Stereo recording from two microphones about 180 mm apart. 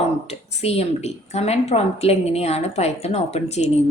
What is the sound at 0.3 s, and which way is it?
A woman's voice, 35° left (ahead or behind).